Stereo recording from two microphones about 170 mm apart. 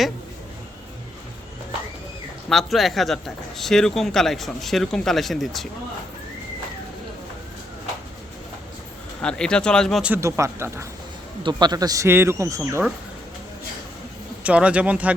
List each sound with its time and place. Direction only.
2.5 s speech: centre (ahead or behind)
9.2 s speech: 5° left (ahead or behind)
10.1 s speech: 15° right (ahead or behind)
14.4 s speech: 5° right (ahead or behind)